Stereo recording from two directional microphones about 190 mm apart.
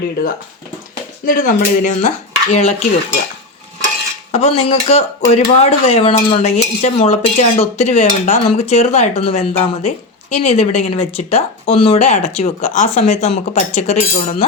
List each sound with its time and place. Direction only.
1.2 s speech: 45° left (ahead or behind)
4.3 s speech: 35° left (ahead or behind)